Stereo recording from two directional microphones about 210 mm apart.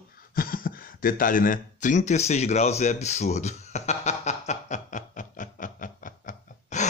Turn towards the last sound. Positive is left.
turn(degrees=35)  # may be behind; listen again after turning